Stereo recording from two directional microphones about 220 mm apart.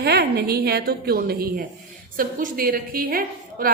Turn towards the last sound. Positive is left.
turn(degrees=-40)  # may be behind; listen again after turning